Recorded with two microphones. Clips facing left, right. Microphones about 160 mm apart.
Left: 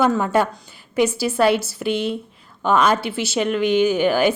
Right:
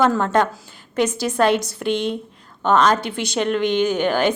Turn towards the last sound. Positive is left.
turn(degrees=5)  # may be behind; listen again after turning